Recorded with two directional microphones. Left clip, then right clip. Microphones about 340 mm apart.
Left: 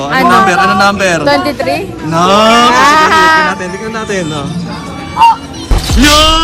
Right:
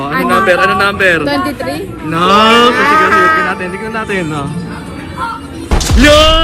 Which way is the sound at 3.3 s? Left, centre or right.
Centre.